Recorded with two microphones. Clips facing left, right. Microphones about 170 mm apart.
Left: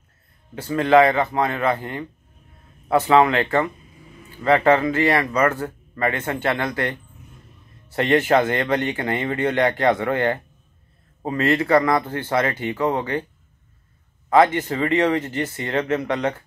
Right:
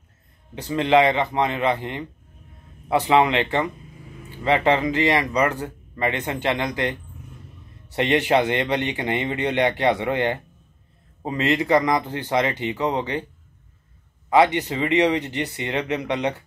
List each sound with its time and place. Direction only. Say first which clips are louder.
0.6 s speech: left 3 dB; 20° right (ahead or behind)
14.3 s speech: left 1 dB; 15° right (ahead or behind)